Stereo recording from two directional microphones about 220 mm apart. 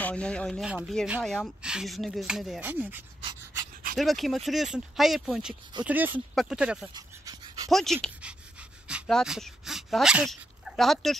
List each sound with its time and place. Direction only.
0.0 s speech: 5° left (ahead or behind)
6.9 s pant: 15° right (ahead or behind)
7.7 s speech: centre (ahead or behind)